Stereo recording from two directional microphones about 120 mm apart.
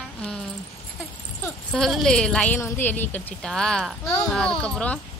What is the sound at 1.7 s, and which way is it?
Speech, 5° left (ahead or behind).